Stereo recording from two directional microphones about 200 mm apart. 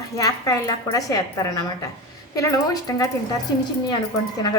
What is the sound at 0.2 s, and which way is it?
A woman's voice, 15° left (ahead or behind).